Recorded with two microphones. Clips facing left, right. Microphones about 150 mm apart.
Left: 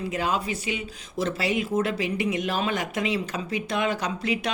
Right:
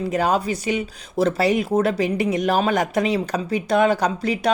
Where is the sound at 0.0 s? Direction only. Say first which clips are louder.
Right 6 dB; 40° right (ahead or behind).